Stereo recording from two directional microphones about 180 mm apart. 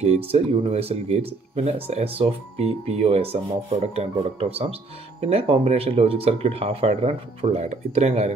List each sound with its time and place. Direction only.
0.0 s speech: 35° right (ahead or behind)